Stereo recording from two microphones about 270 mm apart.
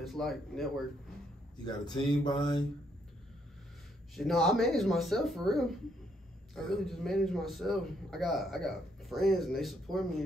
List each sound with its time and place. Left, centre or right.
0.0 s a man's voice: centre
1.7 s a sound: centre
4.1 s a man's voice: centre